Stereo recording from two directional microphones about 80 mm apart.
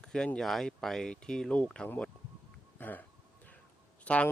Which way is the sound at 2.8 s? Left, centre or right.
Left.